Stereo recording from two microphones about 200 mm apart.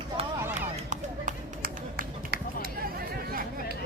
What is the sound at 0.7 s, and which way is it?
Run, 40° right (ahead or behind).